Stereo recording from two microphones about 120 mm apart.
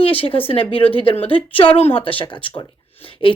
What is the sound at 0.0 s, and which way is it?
Speech, 50° left (ahead or behind).